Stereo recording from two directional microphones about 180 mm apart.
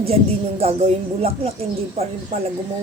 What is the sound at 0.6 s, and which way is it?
Speech, 35° right (ahead or behind).